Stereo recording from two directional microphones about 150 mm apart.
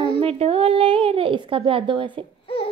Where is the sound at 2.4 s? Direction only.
40° left (ahead or behind).